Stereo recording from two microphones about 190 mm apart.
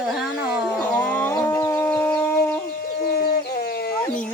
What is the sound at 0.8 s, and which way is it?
Chicken, 10° left (ahead or behind).